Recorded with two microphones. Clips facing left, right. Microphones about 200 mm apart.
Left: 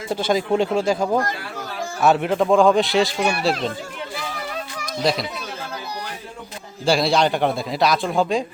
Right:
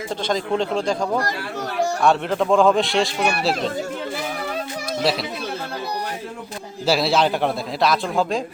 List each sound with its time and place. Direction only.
0.1 s a man's voice: 10° left (ahead or behind)
6.8 s a man's voice: 5° right (ahead or behind)